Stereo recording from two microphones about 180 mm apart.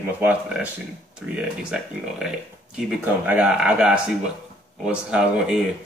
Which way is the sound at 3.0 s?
10° right (ahead or behind).